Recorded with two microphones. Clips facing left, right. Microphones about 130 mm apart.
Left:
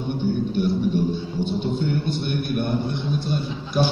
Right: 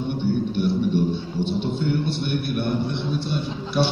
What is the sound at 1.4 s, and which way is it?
A man's voice, 45° left (ahead or behind).